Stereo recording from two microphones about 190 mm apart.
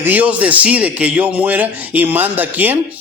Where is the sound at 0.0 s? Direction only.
10° right (ahead or behind).